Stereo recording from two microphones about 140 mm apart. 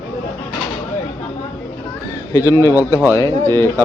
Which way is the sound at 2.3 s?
20° left (ahead or behind).